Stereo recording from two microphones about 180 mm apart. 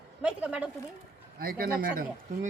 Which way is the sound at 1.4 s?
55° right (ahead or behind).